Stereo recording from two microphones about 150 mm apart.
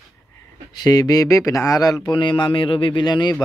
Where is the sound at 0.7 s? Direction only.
25° left (ahead or behind).